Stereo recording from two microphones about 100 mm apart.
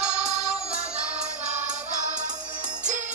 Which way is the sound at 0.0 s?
10° right (ahead or behind).